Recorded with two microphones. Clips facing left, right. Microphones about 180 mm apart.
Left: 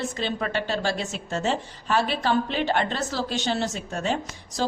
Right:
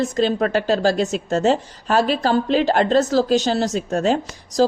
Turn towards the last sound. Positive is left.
turn(degrees=-40)  # may be behind; listen again after turning